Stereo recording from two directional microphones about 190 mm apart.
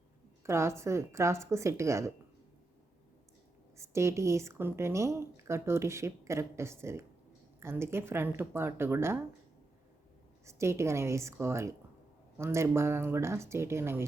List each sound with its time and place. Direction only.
0.4 s a woman's voice: 15° right (ahead or behind)
3.8 s a woman's voice: 15° right (ahead or behind)
10.4 s a woman's voice: 15° right (ahead or behind)